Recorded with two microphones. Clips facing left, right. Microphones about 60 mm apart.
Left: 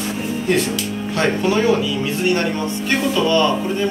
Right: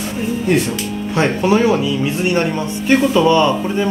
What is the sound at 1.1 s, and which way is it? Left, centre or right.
Speech, centre.